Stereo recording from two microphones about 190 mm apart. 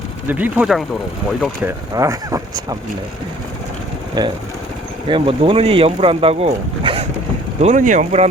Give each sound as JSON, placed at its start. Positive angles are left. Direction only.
{"t": 0.3, "sound": "speech", "side_deg": -10}
{"t": 1.6, "sound": "speech", "side_deg": -15}
{"t": 4.2, "sound": "speech", "side_deg": -25}
{"t": 7.6, "sound": "speech", "side_deg": -40}